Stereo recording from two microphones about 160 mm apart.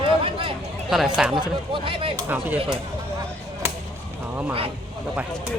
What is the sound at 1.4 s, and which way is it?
Speech, 30° right (ahead or behind).